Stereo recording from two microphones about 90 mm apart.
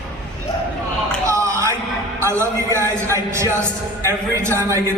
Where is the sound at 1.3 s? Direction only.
35° right (ahead or behind).